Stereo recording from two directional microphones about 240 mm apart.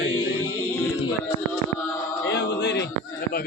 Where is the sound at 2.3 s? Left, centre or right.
Left.